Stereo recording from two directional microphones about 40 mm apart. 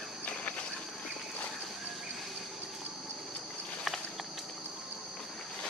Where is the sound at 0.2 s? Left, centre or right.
Left.